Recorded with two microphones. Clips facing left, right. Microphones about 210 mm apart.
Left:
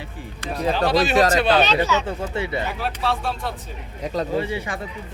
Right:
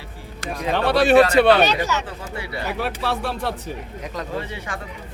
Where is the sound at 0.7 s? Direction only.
65° right (ahead or behind).